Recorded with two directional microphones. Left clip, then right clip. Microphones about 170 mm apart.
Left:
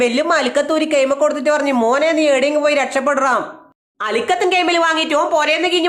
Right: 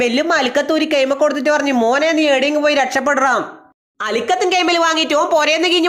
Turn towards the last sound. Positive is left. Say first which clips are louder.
# right 1 dB
turn(degrees=-35)  # may be behind; listen again after turning